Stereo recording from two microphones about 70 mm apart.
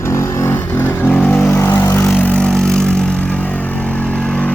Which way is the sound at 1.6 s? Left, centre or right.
Left.